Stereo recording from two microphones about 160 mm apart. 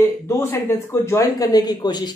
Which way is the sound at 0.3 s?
15° left (ahead or behind).